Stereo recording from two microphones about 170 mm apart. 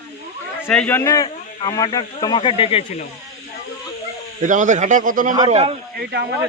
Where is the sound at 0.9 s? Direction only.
20° left (ahead or behind); by 2.8 s 35° left (ahead or behind).